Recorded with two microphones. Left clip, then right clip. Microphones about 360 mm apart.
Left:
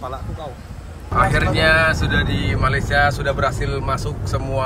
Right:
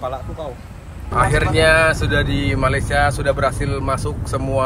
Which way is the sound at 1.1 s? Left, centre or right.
Centre.